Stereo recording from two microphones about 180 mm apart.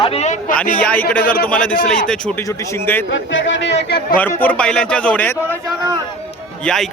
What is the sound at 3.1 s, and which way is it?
Speech, 90° left.